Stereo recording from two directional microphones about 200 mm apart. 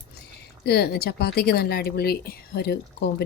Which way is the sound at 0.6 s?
55° left (ahead or behind).